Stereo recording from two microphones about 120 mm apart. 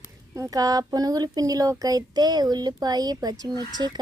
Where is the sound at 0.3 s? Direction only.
30° right (ahead or behind).